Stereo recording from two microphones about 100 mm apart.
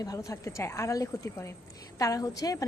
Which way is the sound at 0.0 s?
35° left (ahead or behind).